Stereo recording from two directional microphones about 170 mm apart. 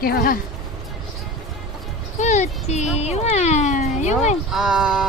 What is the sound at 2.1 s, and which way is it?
Speech, 45° left (ahead or behind).